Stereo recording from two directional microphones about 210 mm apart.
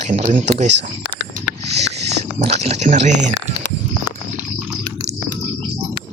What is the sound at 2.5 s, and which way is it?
Speech, 30° right (ahead or behind).